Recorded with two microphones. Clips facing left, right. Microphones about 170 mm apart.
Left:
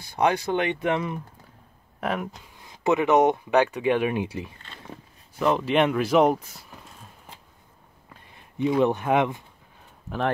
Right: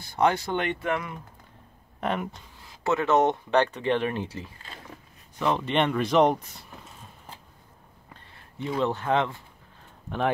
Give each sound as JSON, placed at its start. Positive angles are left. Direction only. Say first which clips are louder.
{"t": 0.0, "sound": "speech", "louder": "left 1 dB", "side_deg": 15}
{"t": 2.0, "sound": "speech", "louder": "left 1 dB", "side_deg": 5}
{"t": 2.7, "sound": "speech", "louder": "left 3 dB", "side_deg": 15}
{"t": 5.4, "sound": "speech", "louder": "left 3 dB", "side_deg": 5}
{"t": 8.1, "sound": "speech", "louder": "left 1 dB", "side_deg": 15}